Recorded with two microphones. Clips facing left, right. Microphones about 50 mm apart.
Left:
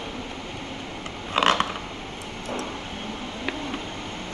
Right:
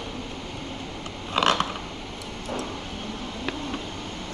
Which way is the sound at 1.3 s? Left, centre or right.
Centre.